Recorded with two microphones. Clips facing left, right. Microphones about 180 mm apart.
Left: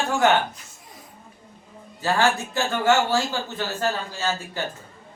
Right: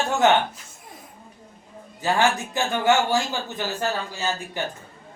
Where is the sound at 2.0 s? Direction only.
15° right (ahead or behind).